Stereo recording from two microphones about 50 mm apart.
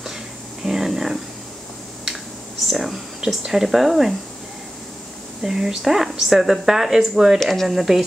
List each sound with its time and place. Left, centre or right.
0.7 s a sound: centre
2.7 s speech: centre
5.4 s speech: centre